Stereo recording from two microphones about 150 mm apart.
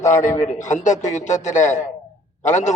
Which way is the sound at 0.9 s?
20° left (ahead or behind).